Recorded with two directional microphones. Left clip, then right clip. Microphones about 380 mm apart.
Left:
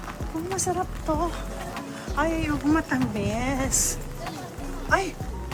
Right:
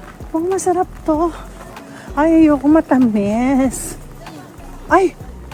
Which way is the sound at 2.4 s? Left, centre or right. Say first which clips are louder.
Right 13 dB; centre.